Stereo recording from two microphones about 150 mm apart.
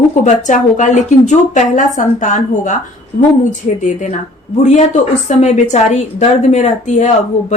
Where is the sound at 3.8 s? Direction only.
55° left (ahead or behind).